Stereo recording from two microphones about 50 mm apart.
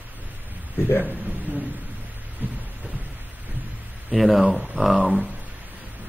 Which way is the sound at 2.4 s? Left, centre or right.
Right.